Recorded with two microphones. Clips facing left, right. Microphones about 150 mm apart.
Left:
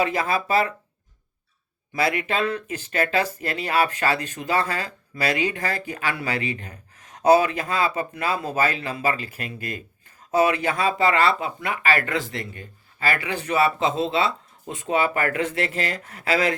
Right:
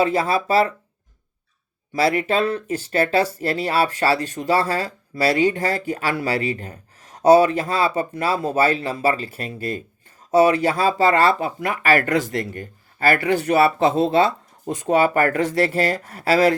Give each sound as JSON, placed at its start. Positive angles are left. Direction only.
{"t": 0.0, "sound": "speech", "side_deg": -30}
{"t": 1.9, "sound": "speech", "side_deg": -35}